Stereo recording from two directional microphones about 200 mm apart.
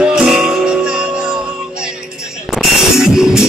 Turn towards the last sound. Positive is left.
turn(degrees=0)  # may be behind; listen again after turning